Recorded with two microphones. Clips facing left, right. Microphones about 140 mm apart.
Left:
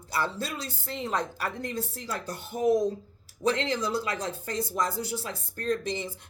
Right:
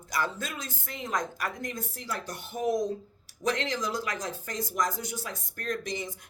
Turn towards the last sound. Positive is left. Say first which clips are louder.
# left 4 dB
turn(degrees=30)  # may be behind; listen again after turning